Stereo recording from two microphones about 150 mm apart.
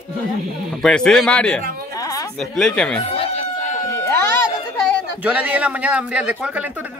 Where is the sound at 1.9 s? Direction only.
25° left (ahead or behind).